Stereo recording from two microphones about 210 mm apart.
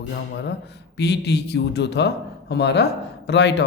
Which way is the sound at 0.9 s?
50° left (ahead or behind).